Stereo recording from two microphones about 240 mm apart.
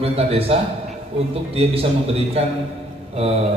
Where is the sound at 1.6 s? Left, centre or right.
Right.